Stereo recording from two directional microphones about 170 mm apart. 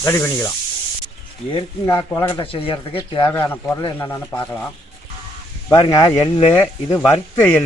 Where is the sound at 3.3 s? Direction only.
15° left (ahead or behind).